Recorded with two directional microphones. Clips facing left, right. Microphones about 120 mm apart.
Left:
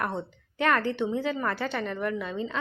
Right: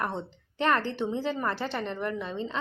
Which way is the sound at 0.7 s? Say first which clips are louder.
Left 1 dB; 25° right (ahead or behind).